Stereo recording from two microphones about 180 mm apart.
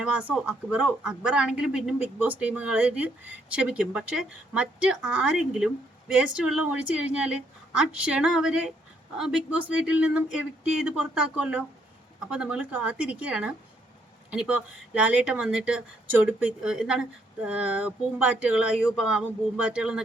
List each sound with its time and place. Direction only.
0.0 s speech: 5° right (ahead or behind)